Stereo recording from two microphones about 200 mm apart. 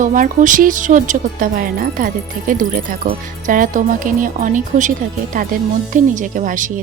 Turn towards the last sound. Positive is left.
turn(degrees=-40)  # may be behind; listen again after turning